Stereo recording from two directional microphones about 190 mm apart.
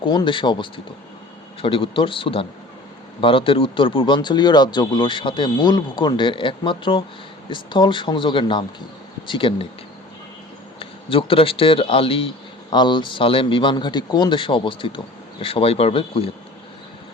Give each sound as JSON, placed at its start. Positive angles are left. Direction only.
{"t": 0.0, "sound": "speech", "side_deg": 25}
{"t": 10.8, "sound": "speech", "side_deg": 25}